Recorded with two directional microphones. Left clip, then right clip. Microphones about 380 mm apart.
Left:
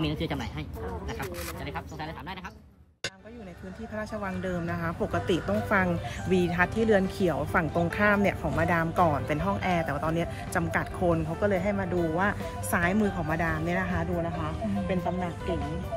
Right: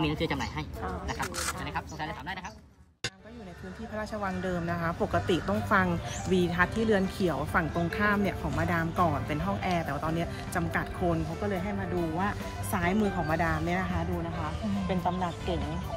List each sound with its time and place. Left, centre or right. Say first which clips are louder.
0.0 s speech: right 2 dB; centre
3.9 s speech: right 1 dB; centre